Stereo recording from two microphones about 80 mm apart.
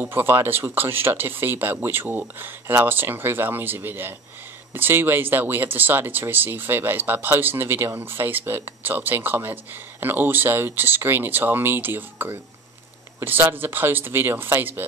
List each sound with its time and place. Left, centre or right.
0.0 s speech: right